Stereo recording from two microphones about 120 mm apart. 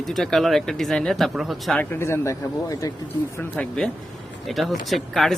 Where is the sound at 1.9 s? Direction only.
20° left (ahead or behind).